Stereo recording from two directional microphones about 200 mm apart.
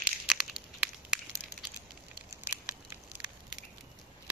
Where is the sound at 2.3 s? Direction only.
10° right (ahead or behind).